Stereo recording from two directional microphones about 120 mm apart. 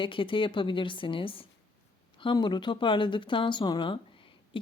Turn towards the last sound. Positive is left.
turn(degrees=45)  # may be behind; listen again after turning